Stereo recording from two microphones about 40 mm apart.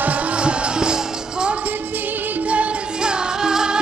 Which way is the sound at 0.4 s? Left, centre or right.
Right.